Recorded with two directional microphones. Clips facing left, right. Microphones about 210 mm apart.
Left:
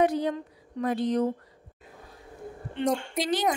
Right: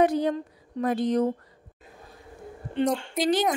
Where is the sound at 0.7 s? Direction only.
45° right (ahead or behind).